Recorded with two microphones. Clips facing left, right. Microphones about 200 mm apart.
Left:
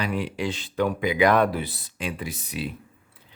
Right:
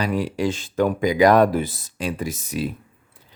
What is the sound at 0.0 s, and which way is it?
Speech, 40° right (ahead or behind).